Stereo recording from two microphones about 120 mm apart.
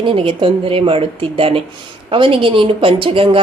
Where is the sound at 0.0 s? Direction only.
50° right (ahead or behind).